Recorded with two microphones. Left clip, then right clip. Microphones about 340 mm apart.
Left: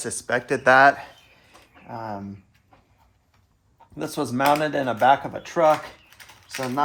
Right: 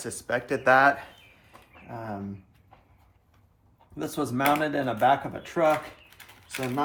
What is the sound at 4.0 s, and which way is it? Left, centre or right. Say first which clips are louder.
Speech: left 4 dB; left.